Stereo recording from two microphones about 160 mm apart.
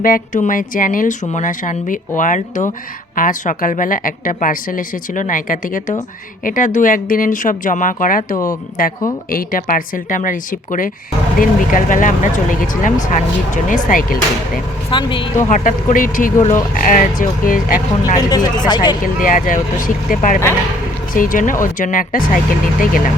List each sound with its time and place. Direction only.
0.0 s a woman's voice: 55° left (ahead or behind)
14.8 s speech: 30° left (ahead or behind)
15.4 s a woman's voice: 50° left (ahead or behind)
18.3 s speech: 25° left (ahead or behind)
19.0 s a woman's voice: 55° left (ahead or behind)